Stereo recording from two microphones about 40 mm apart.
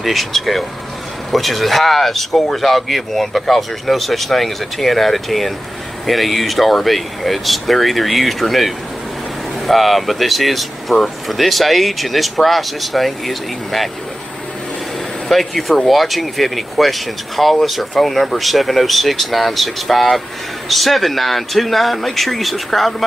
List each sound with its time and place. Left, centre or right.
0.0 s speech: centre
15.2 s speech: centre